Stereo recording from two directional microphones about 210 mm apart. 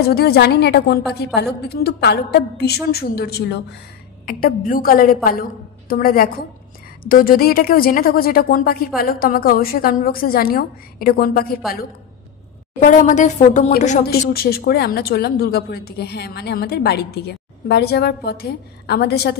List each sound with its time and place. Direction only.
0.0 s a woman's voice: 50° left (ahead or behind)
12.8 s a woman's voice: 35° left (ahead or behind)
14.0 s a woman's voice: 45° left (ahead or behind)